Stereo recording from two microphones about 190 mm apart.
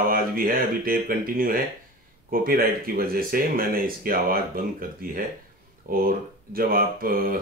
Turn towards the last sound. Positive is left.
turn(degrees=-50)  # may be behind; listen again after turning